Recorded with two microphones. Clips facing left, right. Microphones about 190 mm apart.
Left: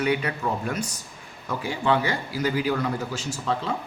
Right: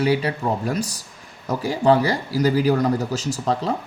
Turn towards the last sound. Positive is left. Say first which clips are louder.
# right 5 dB
turn(degrees=-40)  # may be behind; listen again after turning